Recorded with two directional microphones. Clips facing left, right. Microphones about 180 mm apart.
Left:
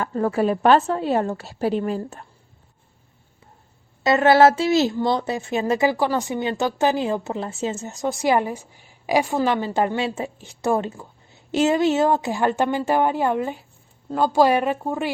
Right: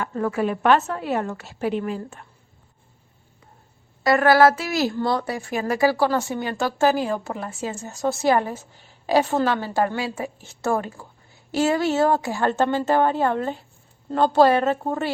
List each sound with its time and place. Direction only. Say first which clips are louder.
0.0 s a woman's voice: left 3 dB; 30° left (ahead or behind)
4.0 s a sound: left 1 dB; 25° left (ahead or behind)
4.9 s speech: left 2 dB; 20° left (ahead or behind)